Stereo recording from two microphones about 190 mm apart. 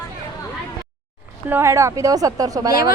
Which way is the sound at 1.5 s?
15° right (ahead or behind).